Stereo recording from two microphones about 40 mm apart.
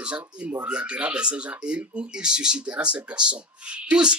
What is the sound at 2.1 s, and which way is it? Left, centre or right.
Speech, right.